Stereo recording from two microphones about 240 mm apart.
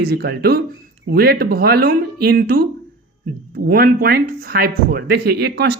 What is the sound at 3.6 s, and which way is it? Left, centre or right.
Speech, right.